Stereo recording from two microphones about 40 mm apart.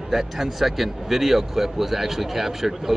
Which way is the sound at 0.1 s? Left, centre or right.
Centre.